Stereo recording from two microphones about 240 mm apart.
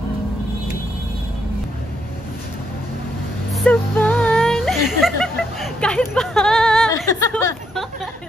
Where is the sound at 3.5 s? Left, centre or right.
Centre.